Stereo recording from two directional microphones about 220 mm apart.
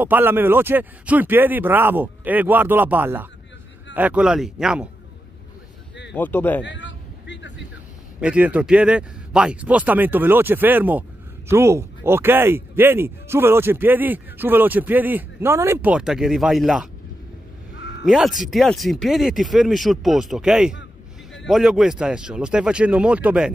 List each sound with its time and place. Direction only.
0.0 s speech: 10° right (ahead or behind)
6.1 s speech: 10° left (ahead or behind)
6.6 s a sound: 55° left (ahead or behind)
8.2 s speech: 5° right (ahead or behind)
17.7 s a sound: 55° left (ahead or behind)
18.0 s speech: centre (ahead or behind)